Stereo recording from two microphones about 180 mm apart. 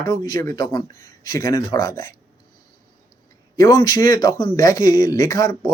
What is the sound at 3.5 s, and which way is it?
Speech, 20° left (ahead or behind).